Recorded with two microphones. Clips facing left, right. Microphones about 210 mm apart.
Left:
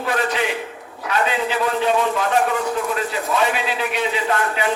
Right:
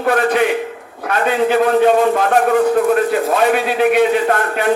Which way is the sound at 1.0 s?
50° right (ahead or behind).